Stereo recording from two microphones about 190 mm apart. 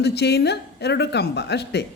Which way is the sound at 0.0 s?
60° left (ahead or behind).